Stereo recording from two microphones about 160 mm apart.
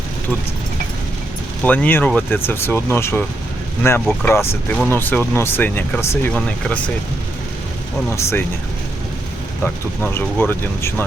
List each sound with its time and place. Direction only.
1.6 s speech: 10° left (ahead or behind)
8.1 s speech: 15° left (ahead or behind)
9.6 s speech: 15° left (ahead or behind)